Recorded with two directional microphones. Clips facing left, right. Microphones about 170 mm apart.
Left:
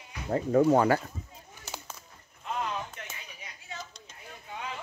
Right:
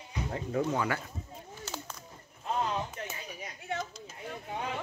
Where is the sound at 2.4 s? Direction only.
30° right (ahead or behind).